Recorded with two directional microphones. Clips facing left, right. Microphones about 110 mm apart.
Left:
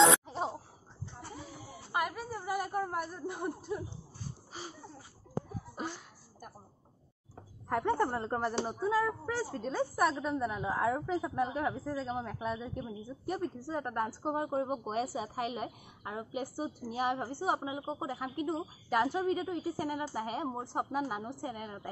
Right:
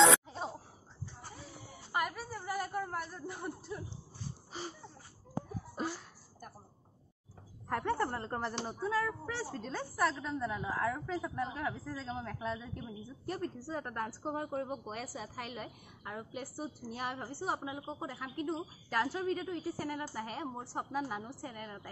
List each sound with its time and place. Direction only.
1.9 s a woman's voice: 5° left (ahead or behind)
7.7 s speech: 15° left (ahead or behind)
14.7 s speech: 30° left (ahead or behind)